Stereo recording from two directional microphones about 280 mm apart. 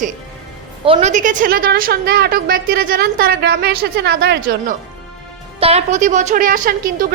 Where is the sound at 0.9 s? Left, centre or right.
Right.